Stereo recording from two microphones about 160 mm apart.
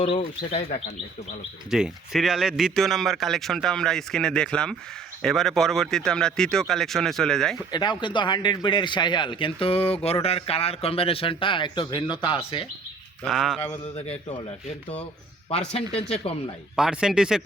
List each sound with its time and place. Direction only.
0.0 s a man's voice: 35° left (ahead or behind)
1.7 s a man's voice: centre (ahead or behind)
7.7 s a man's voice: 25° left (ahead or behind)
13.2 s a man's voice: centre (ahead or behind)
15.4 s a man's voice: 35° left (ahead or behind)
16.7 s a man's voice: 5° right (ahead or behind)